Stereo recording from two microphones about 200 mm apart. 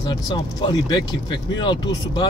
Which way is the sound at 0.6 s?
20° left (ahead or behind).